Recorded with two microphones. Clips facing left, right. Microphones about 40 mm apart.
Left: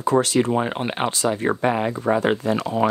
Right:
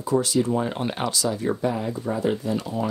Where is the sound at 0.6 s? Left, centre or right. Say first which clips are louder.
Left 3 dB; left.